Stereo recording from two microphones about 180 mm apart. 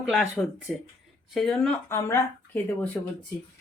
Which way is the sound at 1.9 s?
15° left (ahead or behind).